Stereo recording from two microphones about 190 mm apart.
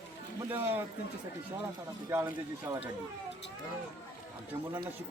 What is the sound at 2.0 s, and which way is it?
Speech, 15° right (ahead or behind).